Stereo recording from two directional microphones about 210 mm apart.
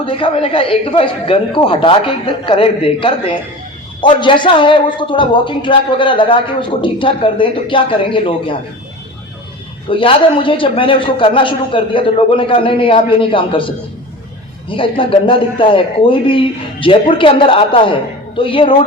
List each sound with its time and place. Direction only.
0.0 s a man's voice: 25° left (ahead or behind)
9.9 s a man's voice: 25° left (ahead or behind)